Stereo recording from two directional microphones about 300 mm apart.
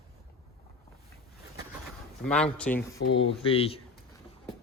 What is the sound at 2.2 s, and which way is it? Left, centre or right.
Speech, centre.